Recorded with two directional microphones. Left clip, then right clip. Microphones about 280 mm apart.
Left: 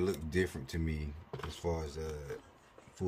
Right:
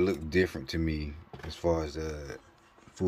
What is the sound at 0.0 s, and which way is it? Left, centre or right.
Speech, centre.